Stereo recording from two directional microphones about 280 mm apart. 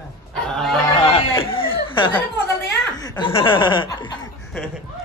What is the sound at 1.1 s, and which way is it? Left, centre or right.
Chatter, centre.